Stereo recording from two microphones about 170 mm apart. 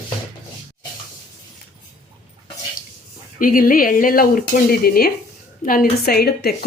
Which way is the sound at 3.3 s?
55° left (ahead or behind).